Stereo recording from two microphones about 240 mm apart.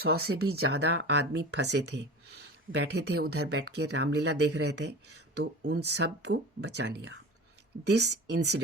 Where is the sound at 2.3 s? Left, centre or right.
Right.